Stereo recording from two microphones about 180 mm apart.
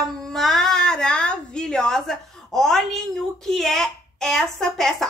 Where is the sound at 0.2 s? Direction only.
Centre (ahead or behind).